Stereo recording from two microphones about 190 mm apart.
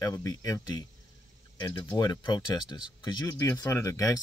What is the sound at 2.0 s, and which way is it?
Speech, 20° left (ahead or behind).